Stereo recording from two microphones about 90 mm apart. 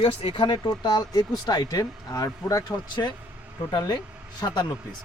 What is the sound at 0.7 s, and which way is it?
Speech, 50° left (ahead or behind).